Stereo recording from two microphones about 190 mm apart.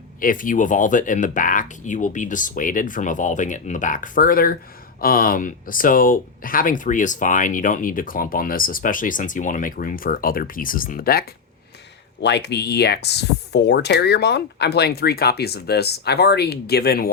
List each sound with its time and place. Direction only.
0.2 s speech: 45° left (ahead or behind)